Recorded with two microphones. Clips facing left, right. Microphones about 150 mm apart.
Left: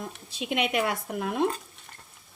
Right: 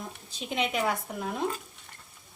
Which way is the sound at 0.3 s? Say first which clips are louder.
Left 3 dB; 70° left (ahead or behind).